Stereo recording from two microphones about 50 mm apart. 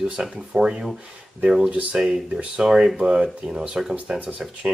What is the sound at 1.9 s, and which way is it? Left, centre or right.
Speech, centre.